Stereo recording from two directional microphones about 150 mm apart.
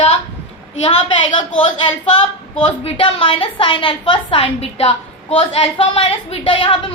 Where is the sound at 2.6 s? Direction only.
35° left (ahead or behind).